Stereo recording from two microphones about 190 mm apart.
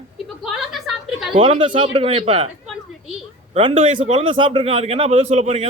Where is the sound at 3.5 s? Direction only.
30° right (ahead or behind).